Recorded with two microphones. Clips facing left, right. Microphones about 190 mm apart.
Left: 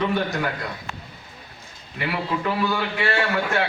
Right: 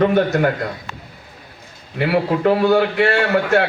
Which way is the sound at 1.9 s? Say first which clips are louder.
Right 9 dB; 55° right (ahead or behind).